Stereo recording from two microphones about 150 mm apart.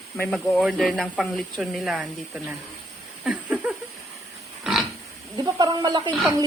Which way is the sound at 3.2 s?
5° right (ahead or behind).